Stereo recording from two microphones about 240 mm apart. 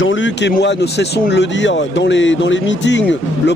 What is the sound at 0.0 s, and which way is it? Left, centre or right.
Speech, left.